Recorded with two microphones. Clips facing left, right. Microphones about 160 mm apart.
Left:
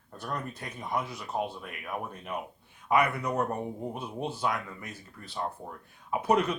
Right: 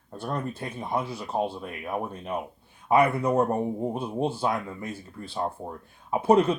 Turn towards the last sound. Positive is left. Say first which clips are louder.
# right 6 dB
turn(degrees=-30)  # may be behind; listen again after turning